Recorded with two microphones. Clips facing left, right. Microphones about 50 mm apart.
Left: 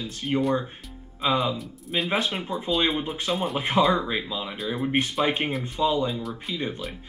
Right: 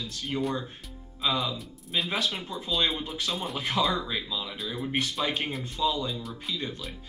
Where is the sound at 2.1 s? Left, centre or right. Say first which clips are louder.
Left 4 dB; left.